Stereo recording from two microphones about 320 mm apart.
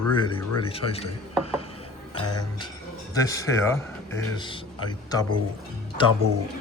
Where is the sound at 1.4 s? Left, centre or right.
Centre.